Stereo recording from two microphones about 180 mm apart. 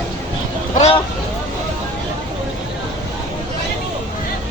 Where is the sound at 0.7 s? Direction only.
35° left (ahead or behind).